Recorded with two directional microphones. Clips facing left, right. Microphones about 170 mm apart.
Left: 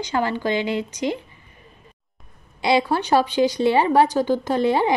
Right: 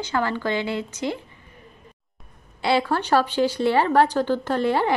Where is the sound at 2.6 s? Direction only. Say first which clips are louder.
Left 2 dB; 15° left (ahead or behind).